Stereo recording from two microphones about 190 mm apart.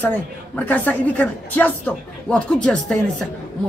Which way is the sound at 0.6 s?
10° left (ahead or behind).